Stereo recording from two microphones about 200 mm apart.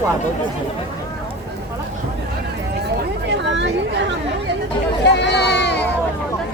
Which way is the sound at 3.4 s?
65° right (ahead or behind).